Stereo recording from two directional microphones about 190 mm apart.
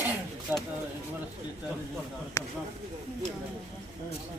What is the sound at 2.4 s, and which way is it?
Speech, 15° left (ahead or behind).